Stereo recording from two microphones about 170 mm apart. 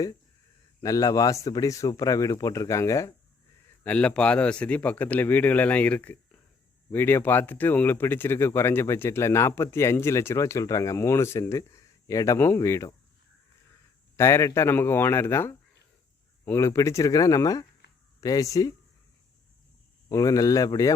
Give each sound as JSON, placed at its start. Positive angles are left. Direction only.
{"t": 0.8, "sound": "a man's voice", "side_deg": 20}
{"t": 3.8, "sound": "speech", "side_deg": 5}
{"t": 14.2, "sound": "a man's voice", "side_deg": 15}
{"t": 20.1, "sound": "a man's voice", "side_deg": 20}